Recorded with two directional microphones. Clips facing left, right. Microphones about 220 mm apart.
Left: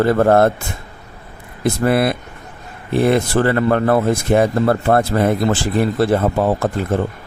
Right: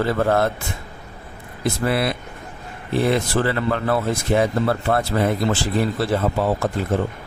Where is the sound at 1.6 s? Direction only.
50° left (ahead or behind).